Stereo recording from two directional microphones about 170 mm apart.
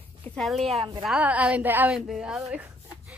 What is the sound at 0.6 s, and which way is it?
Speech, 40° right (ahead or behind).